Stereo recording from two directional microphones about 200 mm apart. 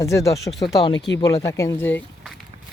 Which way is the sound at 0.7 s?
25° left (ahead or behind).